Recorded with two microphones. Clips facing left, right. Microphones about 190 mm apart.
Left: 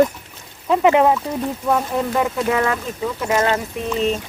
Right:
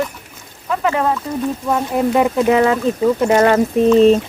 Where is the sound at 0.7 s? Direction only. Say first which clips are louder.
Left 4 dB; 20° left (ahead or behind).